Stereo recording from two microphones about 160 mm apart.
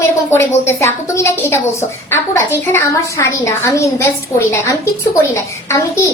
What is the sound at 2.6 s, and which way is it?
A child's voice, 15° left (ahead or behind).